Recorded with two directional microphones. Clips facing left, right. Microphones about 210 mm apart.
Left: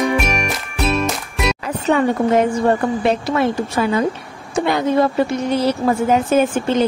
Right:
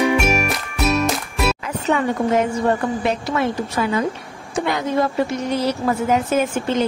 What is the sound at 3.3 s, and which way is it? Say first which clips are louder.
Speech: left 3 dB; 35° left (ahead or behind).